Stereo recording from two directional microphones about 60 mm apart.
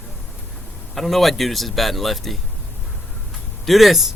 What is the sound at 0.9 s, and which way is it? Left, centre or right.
Speech, centre.